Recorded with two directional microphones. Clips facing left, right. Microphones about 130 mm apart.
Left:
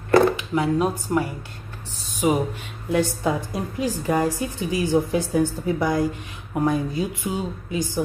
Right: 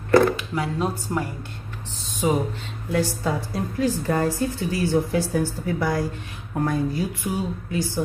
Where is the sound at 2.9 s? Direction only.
20° left (ahead or behind).